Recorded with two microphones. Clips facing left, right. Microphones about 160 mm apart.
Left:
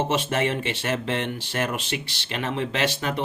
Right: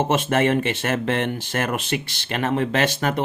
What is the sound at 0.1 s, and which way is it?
Speech, 55° right (ahead or behind).